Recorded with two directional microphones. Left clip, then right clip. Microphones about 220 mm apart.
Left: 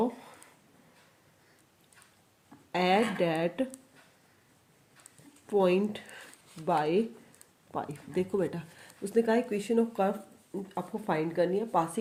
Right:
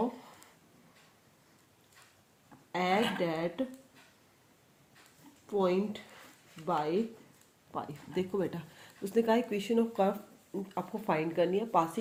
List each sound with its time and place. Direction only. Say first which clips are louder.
0.1 s a sound: left 2 dB; 30° left (ahead or behind)
2.7 s speech: left 3 dB; 30° left (ahead or behind)
5.5 s speech: left 4 dB; 35° left (ahead or behind); by 11.9 s 10° left (ahead or behind)